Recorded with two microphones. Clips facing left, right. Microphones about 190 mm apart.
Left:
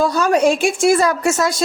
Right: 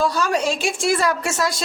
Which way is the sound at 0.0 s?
50° left (ahead or behind).